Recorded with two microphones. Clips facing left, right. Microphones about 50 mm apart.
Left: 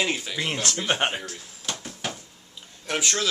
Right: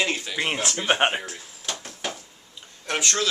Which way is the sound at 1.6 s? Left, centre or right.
Centre.